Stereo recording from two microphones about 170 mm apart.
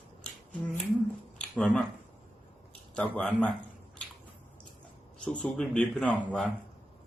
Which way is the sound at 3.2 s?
5° left (ahead or behind).